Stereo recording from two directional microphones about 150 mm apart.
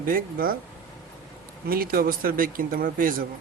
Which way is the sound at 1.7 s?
75° right (ahead or behind).